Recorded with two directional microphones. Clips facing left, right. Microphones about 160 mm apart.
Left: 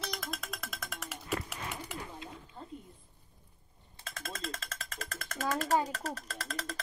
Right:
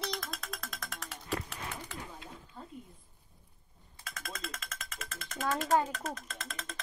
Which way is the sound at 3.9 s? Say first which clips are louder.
Left 1 dB; 30° left (ahead or behind).